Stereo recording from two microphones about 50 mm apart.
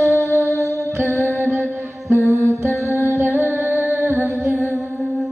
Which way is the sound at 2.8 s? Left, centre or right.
Right.